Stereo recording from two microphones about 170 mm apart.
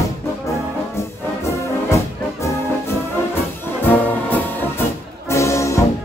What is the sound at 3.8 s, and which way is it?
Brass instrument, 10° left (ahead or behind).